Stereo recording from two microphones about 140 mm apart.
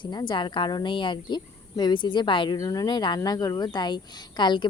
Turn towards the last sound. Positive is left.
turn(degrees=35)  # may be behind; listen again after turning